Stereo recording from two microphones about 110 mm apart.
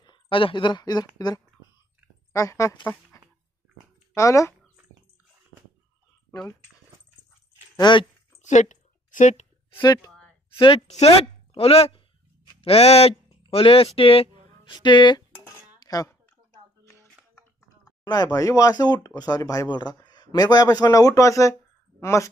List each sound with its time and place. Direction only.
0.0 s speech: 50° left (ahead or behind); by 2.8 s 30° left (ahead or behind)
2.8 s speech: 20° left (ahead or behind)
7.7 s speech: 45° left (ahead or behind)
8.4 s a sound: 90° left
9.8 s speech: 40° left (ahead or behind)
10.5 s a woman's voice: 55° left (ahead or behind)
10.9 s a woman's voice: 65° left (ahead or behind)
14.6 s speech: 45° left (ahead or behind)
15.8 s a sound: 35° left (ahead or behind)
17.8 s speech: 35° left (ahead or behind)